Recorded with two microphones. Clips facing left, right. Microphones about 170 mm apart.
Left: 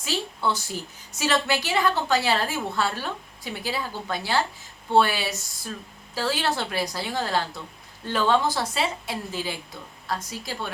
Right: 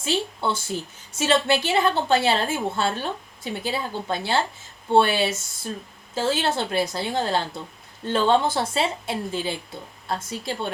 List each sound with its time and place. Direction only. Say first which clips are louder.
0.0 s a woman's voice: right 2 dB; 25° right (ahead or behind)